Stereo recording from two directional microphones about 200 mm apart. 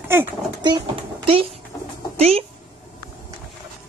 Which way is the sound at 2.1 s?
30° right (ahead or behind).